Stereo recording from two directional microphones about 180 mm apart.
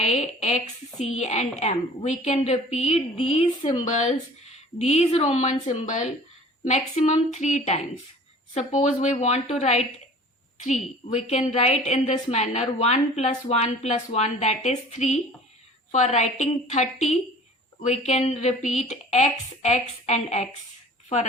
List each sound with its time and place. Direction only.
0.0 s a woman's voice: 40° left (ahead or behind)